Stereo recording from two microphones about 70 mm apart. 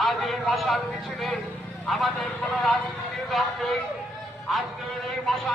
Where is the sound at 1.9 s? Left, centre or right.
Centre.